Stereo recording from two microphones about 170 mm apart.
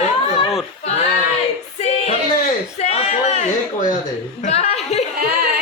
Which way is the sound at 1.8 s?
40° left (ahead or behind).